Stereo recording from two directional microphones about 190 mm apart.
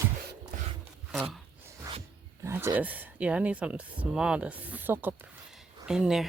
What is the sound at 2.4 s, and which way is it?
Speech, 10° right (ahead or behind).